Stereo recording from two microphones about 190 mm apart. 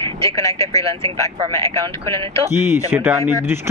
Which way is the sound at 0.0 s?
15° left (ahead or behind).